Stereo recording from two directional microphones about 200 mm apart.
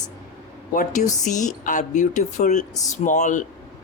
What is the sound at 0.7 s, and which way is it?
Speech, 40° left (ahead or behind).